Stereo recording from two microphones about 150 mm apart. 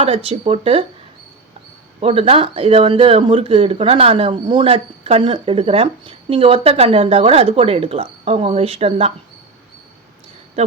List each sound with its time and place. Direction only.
0.0 s speech: 40° right (ahead or behind)
2.0 s speech: 40° right (ahead or behind)